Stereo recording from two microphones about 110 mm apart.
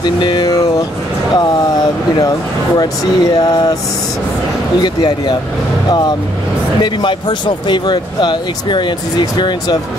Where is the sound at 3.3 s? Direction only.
35° left (ahead or behind).